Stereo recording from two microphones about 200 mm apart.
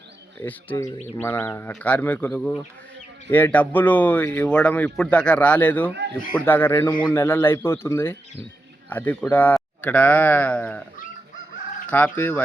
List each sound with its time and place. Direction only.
0.3 s speech: 10° left (ahead or behind)
5.9 s speech: 60° right (ahead or behind)
6.3 s speech: 10° left (ahead or behind)
11.9 s speech: 10° left (ahead or behind)